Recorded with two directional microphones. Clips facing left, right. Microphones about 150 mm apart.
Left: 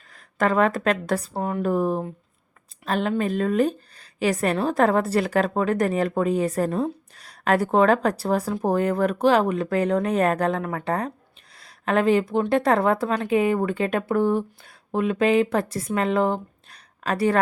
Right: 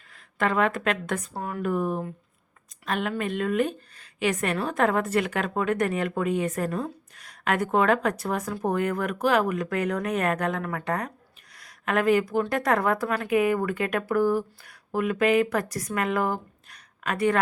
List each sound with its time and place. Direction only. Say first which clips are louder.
0.1 s a woman's voice: left 4 dB; 40° left (ahead or behind)